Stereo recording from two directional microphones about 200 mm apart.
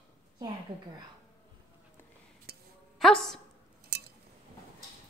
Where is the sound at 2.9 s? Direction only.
Centre (ahead or behind).